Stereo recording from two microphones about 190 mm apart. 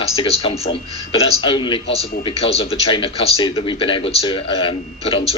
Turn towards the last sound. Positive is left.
turn(degrees=30)  # may be behind; listen again after turning